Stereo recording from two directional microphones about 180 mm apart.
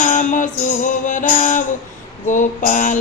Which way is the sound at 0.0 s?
45° left (ahead or behind).